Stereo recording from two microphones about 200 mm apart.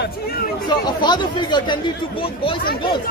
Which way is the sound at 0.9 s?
20° left (ahead or behind).